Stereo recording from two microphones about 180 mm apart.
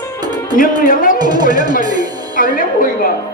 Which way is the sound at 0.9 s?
50° left (ahead or behind).